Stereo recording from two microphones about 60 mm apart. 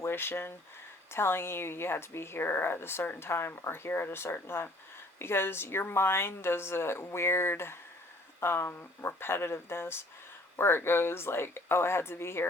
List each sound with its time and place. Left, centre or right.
0.0 s a woman's voice: left